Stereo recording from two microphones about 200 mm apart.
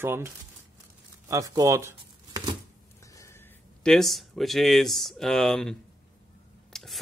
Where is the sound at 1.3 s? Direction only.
15° right (ahead or behind).